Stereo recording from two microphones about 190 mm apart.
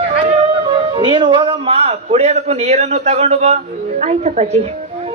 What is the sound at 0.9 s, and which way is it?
A man's voice, 25° right (ahead or behind).